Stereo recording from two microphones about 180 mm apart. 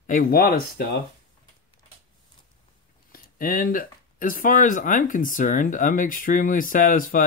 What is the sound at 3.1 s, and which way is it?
Speech, 50° left (ahead or behind).